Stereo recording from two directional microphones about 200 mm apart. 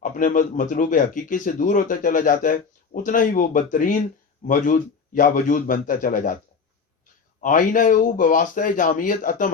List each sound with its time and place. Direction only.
0.0 s speech: 40° left (ahead or behind)
7.4 s speech: 40° left (ahead or behind)